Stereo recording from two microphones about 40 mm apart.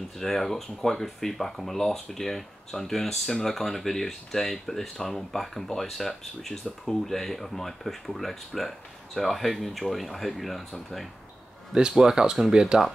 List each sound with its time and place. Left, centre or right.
0.2 s speech: centre
11.7 s speech: centre